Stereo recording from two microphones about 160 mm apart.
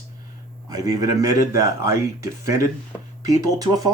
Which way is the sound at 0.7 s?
20° right (ahead or behind).